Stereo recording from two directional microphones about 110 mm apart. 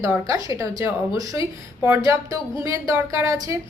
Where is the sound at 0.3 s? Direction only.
30° right (ahead or behind).